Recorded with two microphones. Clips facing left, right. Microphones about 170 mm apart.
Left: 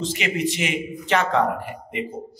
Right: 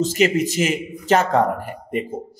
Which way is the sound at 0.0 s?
45° right (ahead or behind).